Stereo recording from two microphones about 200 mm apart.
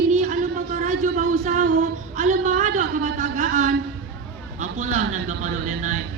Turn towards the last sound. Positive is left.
turn(degrees=-35)  # may be behind; listen again after turning